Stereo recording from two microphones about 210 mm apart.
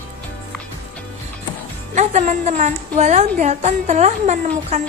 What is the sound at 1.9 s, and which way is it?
Speech, 35° right (ahead or behind).